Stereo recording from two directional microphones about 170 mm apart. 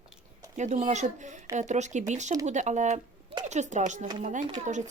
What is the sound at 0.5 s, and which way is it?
A child's voice, 45° right (ahead or behind).